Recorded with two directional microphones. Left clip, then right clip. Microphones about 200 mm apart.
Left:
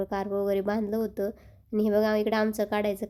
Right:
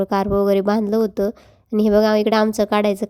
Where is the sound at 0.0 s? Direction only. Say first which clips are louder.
Right 11 dB; 30° right (ahead or behind).